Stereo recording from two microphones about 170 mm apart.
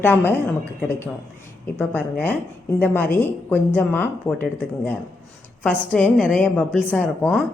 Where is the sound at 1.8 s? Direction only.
10° left (ahead or behind).